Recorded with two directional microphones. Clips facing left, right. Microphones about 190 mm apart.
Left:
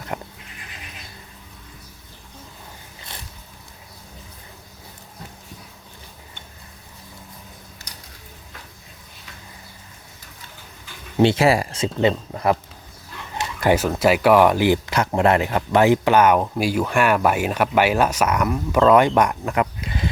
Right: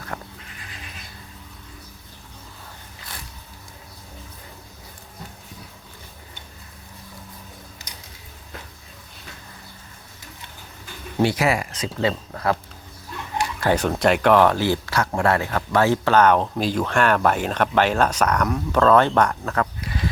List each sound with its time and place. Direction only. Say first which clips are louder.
0.1 s neigh: left 4 dB; 20° left (ahead or behind)
11.2 s speech: left 4 dB; 25° left (ahead or behind)
13.4 s a sound: left 3 dB; 15° left (ahead or behind)
13.7 s speech: left 1 dB; 5° left (ahead or behind)